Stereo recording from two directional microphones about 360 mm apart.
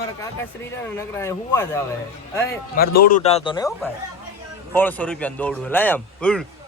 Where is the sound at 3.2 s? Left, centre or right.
Centre.